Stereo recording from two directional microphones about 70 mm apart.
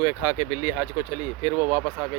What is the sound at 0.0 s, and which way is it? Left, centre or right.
Speech, right.